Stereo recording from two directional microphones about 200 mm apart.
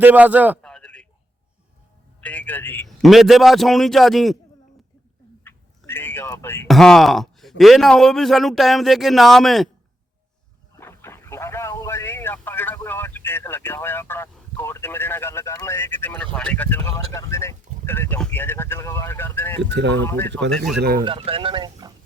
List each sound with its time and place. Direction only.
0.0 s a man's voice: 5° right (ahead or behind)
0.6 s a sound: 5° left (ahead or behind)
2.2 s a man's voice: 5° left (ahead or behind)
5.4 s a sound: 10° left (ahead or behind)
6.7 s a man's voice: centre (ahead or behind)
10.8 s boat: 10° left (ahead or behind)
19.6 s speech: 60° right (ahead or behind)
20.0 s speech: 10° left (ahead or behind)
20.7 s speech: 50° right (ahead or behind)
21.0 s speech: 25° right (ahead or behind)